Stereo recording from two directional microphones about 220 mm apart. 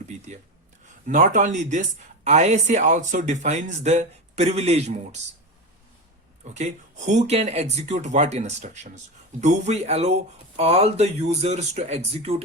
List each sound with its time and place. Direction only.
1.0 s speech: 35° right (ahead or behind)
6.4 s speech: 30° right (ahead or behind)